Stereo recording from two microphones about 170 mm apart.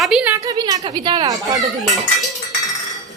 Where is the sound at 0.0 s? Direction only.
5° right (ahead or behind).